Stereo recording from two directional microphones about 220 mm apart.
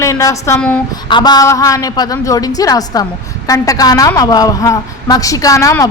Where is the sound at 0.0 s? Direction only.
15° left (ahead or behind).